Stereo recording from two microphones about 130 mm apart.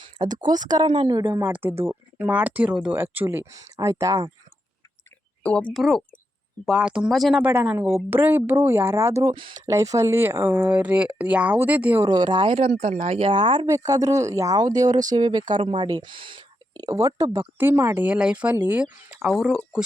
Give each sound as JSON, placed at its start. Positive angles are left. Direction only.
{"t": 0.0, "sound": "speech", "side_deg": -35}
{"t": 1.1, "sound": "speech", "side_deg": -20}
{"t": 5.4, "sound": "speech", "side_deg": 10}
{"t": 7.3, "sound": "speech", "side_deg": -10}
{"t": 9.3, "sound": "speech", "side_deg": -40}
{"t": 9.6, "sound": "speech", "side_deg": -25}
{"t": 12.0, "sound": "speech", "side_deg": -30}
{"t": 12.5, "sound": "speech", "side_deg": -55}
{"t": 13.7, "sound": "speech", "side_deg": -25}
{"t": 16.8, "sound": "speech", "side_deg": -25}